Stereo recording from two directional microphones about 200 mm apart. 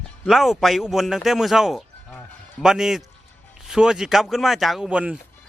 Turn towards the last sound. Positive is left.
turn(degrees=-5)  # may be behind; listen again after turning